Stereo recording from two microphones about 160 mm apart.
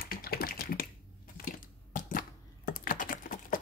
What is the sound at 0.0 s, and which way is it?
Typing, 70° left (ahead or behind).